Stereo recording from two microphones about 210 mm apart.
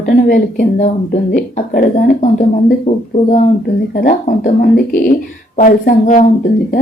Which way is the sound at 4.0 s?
35° left (ahead or behind).